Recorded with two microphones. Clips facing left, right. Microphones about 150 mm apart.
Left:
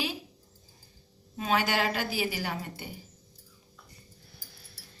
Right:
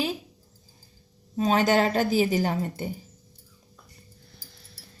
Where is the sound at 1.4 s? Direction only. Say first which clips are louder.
Right 7 dB; 40° right (ahead or behind).